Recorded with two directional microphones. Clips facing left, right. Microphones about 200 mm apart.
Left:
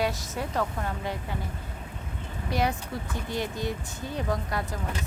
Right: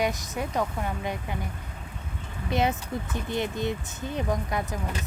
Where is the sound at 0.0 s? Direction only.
15° right (ahead or behind).